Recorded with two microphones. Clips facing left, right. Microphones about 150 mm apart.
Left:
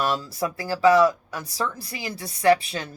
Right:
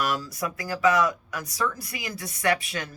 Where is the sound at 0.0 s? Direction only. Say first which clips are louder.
Left 3 dB; 25° left (ahead or behind).